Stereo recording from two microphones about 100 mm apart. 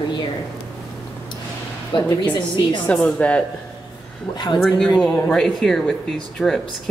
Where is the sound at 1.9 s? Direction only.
55° left (ahead or behind).